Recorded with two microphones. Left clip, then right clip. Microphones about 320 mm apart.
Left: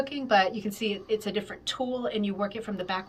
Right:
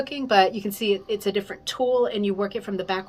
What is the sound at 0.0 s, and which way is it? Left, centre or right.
A woman's voice, centre.